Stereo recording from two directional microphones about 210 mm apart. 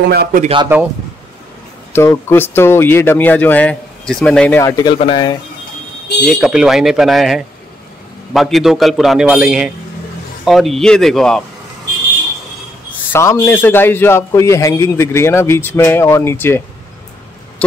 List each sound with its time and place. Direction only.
0.1 s speech: 50° right (ahead or behind)
0.4 s speech: 25° right (ahead or behind)
1.9 s speech: 10° left (ahead or behind)
6.3 s a man's voice: 5° right (ahead or behind)
13.1 s speech: 10° left (ahead or behind)